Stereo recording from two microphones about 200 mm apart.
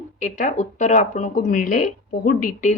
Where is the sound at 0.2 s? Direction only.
40° left (ahead or behind).